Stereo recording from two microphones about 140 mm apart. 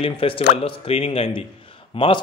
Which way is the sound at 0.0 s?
40° left (ahead or behind).